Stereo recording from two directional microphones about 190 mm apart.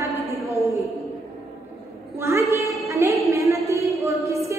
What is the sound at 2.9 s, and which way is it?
Music, 15° right (ahead or behind).